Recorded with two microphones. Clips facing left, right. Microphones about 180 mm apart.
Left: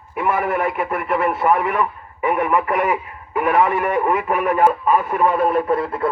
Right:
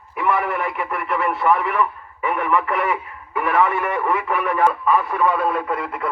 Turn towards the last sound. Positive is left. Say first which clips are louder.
# left 5 dB
turn(degrees=25)  # may be behind; listen again after turning